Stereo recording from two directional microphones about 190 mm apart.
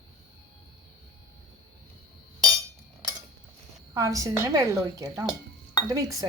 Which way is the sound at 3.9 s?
15° right (ahead or behind).